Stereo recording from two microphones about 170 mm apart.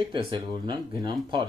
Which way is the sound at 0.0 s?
30° right (ahead or behind).